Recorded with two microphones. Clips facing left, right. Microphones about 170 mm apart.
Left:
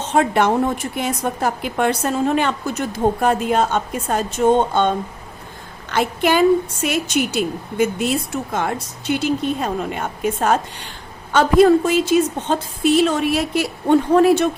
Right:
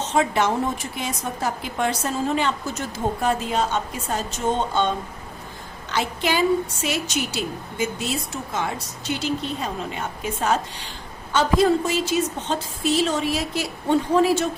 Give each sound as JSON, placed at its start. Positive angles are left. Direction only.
{"t": 0.1, "sound": "a woman's voice", "side_deg": 60}